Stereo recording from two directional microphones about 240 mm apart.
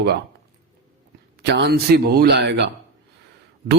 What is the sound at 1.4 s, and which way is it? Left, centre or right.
Mantra, right.